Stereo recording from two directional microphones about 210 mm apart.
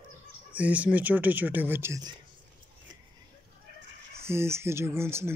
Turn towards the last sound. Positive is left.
turn(degrees=-10)  # may be behind; listen again after turning